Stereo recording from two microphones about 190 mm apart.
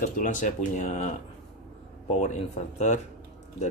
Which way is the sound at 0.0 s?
45° left (ahead or behind).